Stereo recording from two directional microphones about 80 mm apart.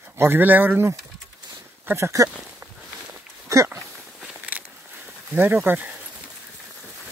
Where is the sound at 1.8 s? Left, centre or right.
Right.